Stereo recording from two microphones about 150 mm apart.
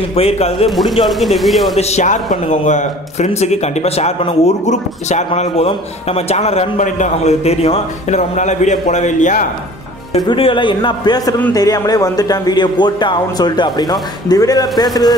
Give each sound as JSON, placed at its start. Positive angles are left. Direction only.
{"t": 0.1, "sound": "a man's voice", "side_deg": 40}
{"t": 0.7, "sound": "speech", "side_deg": 0}
{"t": 1.8, "sound": "a man's voice", "side_deg": 50}
{"t": 10.2, "sound": "a man's voice", "side_deg": 35}